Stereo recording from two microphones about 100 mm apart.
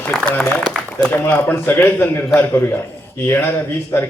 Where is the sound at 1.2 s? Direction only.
20° left (ahead or behind).